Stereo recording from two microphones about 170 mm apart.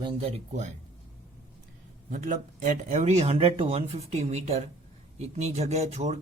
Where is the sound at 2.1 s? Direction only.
50° right (ahead or behind).